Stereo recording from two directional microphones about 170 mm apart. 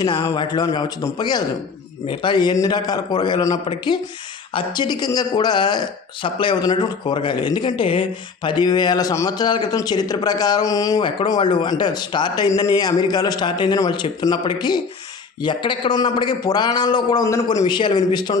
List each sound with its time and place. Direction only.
0.0 s speech: 20° left (ahead or behind)